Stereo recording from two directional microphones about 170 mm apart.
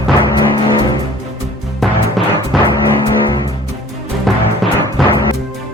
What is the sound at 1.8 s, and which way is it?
Music, centre (ahead or behind).